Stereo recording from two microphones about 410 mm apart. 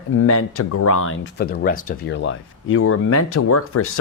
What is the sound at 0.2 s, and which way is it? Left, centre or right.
Speech, left.